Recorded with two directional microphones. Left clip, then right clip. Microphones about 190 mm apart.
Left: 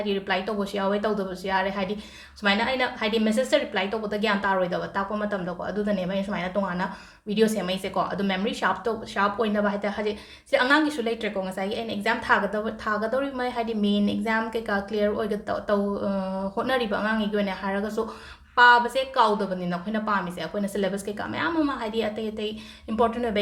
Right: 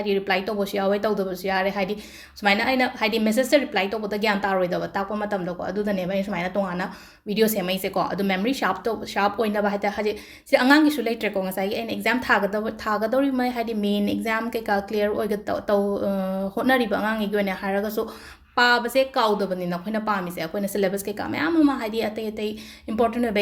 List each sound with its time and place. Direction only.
0.0 s a woman's voice: 35° right (ahead or behind)